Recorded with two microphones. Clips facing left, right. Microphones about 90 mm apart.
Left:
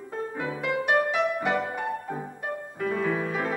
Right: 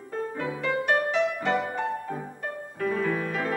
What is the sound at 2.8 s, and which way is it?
Music, 10° left (ahead or behind).